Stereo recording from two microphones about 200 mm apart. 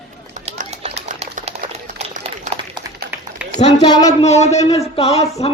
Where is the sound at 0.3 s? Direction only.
35° right (ahead or behind).